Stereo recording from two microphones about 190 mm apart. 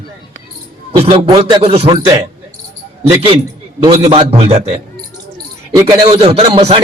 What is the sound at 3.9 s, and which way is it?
Speech, 35° right (ahead or behind).